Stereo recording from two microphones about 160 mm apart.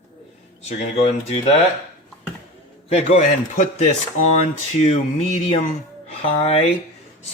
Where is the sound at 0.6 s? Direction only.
45° left (ahead or behind).